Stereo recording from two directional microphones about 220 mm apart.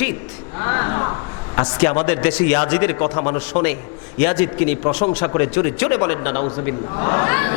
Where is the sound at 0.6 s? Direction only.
20° left (ahead or behind).